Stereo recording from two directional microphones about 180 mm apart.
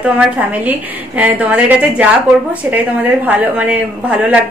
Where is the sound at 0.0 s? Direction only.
5° right (ahead or behind).